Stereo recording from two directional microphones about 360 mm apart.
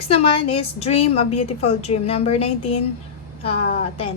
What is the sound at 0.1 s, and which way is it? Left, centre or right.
A woman's voice, centre.